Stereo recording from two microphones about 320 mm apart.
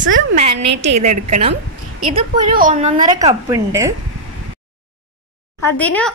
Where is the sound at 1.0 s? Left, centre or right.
Right.